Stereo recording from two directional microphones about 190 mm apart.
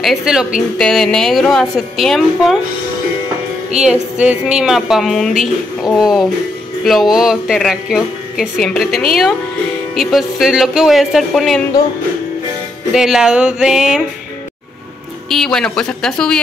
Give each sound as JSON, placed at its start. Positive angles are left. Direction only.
{"t": 0.0, "sound": "a woman's voice", "side_deg": 0}
{"t": 3.7, "sound": "a woman's voice", "side_deg": -5}
{"t": 12.9, "sound": "a woman's voice", "side_deg": -5}
{"t": 15.2, "sound": "a woman's voice", "side_deg": 0}